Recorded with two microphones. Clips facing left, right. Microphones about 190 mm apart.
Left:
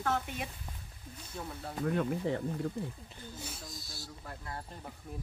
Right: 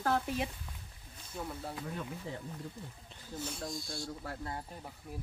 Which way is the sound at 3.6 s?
Centre (ahead or behind).